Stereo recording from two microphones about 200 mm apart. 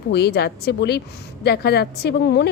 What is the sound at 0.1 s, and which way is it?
A woman's voice, 55° left (ahead or behind).